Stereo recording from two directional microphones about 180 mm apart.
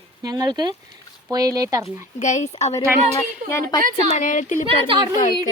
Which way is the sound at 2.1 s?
40° left (ahead or behind).